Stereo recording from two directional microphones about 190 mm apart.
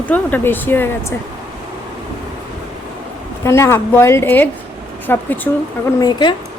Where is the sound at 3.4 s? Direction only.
15° left (ahead or behind).